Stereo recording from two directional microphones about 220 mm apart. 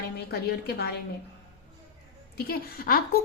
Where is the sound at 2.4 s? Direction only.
40° left (ahead or behind).